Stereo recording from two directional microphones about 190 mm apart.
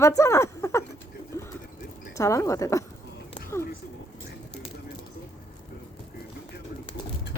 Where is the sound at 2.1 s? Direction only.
15° left (ahead or behind).